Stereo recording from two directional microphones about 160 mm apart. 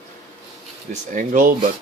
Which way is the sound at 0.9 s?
55° right (ahead or behind).